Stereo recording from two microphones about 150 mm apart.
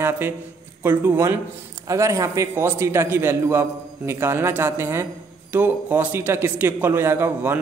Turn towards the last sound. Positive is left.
turn(degrees=-15)  # may be behind; listen again after turning